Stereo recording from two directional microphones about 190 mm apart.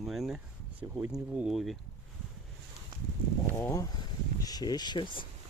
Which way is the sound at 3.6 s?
15° left (ahead or behind).